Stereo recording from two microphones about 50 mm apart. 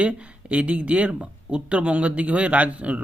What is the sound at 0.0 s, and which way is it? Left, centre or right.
A man's voice, right.